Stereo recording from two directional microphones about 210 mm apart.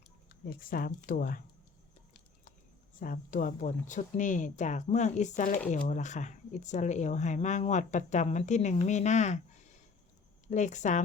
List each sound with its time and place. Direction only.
0.3 s speech: 45° left (ahead or behind)
3.0 s speech: 40° left (ahead or behind)
10.5 s speech: 35° left (ahead or behind)